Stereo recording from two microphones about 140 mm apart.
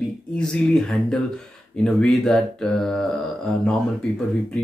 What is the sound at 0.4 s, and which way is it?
Speech, 5° left (ahead or behind).